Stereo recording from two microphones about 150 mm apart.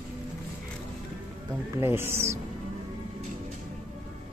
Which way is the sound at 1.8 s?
15° right (ahead or behind).